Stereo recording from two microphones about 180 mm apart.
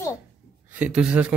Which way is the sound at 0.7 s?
5° right (ahead or behind).